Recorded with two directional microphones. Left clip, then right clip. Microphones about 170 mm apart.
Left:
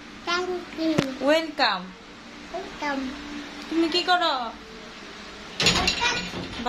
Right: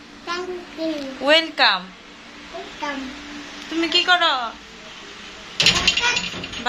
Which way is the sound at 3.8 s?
Centre (ahead or behind).